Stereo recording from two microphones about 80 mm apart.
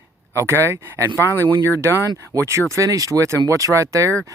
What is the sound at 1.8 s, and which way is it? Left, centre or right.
Speech, right.